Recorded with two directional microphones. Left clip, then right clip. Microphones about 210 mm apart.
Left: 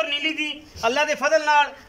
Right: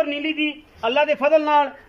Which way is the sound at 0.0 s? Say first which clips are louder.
Right 1 dB; 20° right (ahead or behind).